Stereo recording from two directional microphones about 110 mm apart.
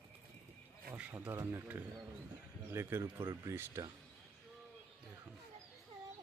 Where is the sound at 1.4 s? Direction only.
25° right (ahead or behind).